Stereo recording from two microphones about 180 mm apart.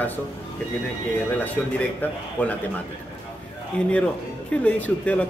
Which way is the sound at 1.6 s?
10° left (ahead or behind).